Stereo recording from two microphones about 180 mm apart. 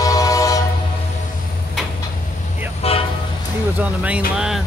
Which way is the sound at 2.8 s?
35° left (ahead or behind).